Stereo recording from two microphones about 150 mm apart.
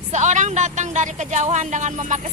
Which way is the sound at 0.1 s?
50° right (ahead or behind).